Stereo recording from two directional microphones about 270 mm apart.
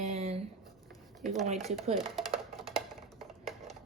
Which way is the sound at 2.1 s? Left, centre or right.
Centre.